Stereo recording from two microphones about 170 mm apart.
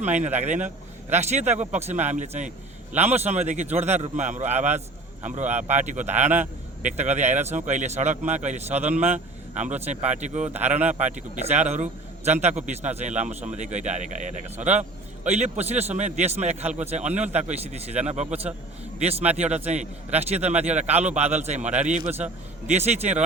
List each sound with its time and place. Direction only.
0.0 s a man's voice: 40° right (ahead or behind)
19.4 s a man's voice: 40° right (ahead or behind)
22.0 s a man's voice: 10° right (ahead or behind)
22.6 s a man's voice: 40° right (ahead or behind)